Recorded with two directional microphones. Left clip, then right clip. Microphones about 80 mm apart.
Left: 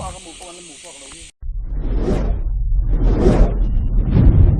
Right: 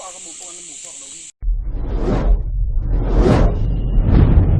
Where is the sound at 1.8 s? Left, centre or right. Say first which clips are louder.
Even; centre.